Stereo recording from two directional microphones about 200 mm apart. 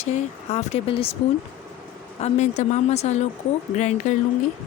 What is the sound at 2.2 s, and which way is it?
Speech, 35° left (ahead or behind).